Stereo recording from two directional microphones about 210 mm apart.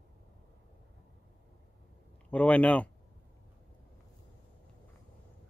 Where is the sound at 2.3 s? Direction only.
5° left (ahead or behind).